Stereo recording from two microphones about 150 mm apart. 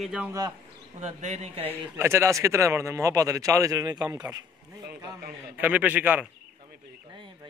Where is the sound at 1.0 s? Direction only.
50° right (ahead or behind).